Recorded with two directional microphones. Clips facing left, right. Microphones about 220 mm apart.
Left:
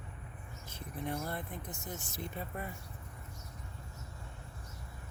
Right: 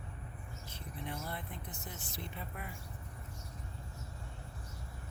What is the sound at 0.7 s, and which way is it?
Vehicle, 45° left (ahead or behind).